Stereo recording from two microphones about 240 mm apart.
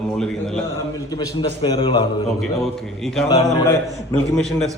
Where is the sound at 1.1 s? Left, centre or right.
Centre.